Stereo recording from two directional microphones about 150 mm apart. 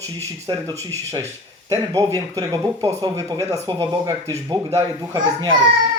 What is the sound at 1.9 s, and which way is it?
A child's voice, 25° right (ahead or behind).